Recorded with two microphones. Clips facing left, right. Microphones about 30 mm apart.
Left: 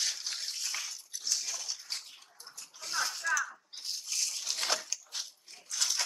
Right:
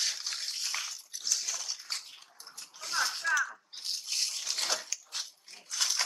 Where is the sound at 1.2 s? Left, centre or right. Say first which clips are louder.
Right 1 dB; right.